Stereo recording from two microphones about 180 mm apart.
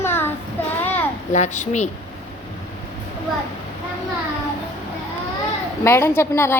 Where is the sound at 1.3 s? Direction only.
40° left (ahead or behind).